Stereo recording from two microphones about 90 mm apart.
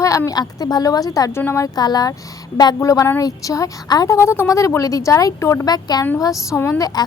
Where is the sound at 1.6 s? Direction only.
45° left (ahead or behind).